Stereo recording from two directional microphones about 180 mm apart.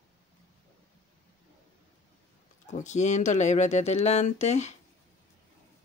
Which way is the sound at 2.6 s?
40° left (ahead or behind).